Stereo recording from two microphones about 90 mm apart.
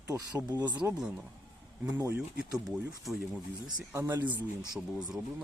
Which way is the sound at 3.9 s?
30° right (ahead or behind).